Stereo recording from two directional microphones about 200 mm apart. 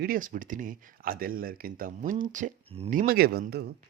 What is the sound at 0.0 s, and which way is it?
Speech, 45° right (ahead or behind).